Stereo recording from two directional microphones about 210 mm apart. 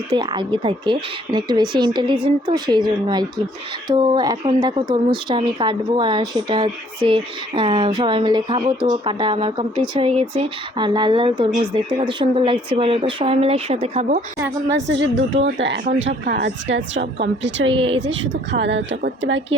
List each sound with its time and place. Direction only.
0.1 s speech: 20° right (ahead or behind)
14.7 s a woman's voice: 60° right (ahead or behind)
17.7 s speech: 25° right (ahead or behind)
18.5 s a woman's voice: 55° right (ahead or behind)